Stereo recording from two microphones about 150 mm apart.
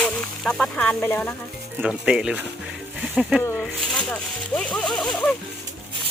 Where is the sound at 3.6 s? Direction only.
5° left (ahead or behind).